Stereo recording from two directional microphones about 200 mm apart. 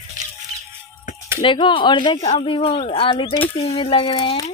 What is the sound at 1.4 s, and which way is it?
Speech, 25° left (ahead or behind).